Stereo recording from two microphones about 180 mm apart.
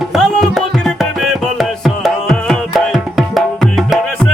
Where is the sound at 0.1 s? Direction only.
Centre (ahead or behind).